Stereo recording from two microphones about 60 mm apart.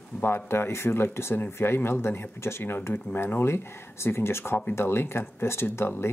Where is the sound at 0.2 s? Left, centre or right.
Left.